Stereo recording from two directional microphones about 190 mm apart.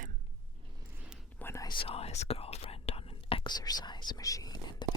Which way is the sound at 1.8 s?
30° left (ahead or behind).